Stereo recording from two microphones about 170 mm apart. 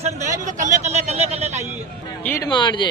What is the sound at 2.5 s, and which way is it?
Speech, 25° left (ahead or behind).